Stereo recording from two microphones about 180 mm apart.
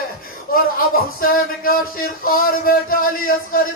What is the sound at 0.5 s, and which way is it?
Speech, 55° left (ahead or behind).